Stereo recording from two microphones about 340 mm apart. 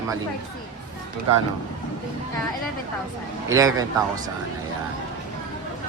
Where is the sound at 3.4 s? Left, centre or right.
Centre.